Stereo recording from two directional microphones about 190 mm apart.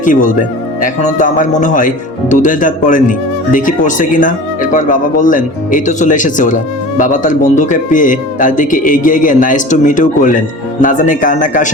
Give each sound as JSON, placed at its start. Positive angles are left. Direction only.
{"t": 0.0, "sound": "speech", "side_deg": 45}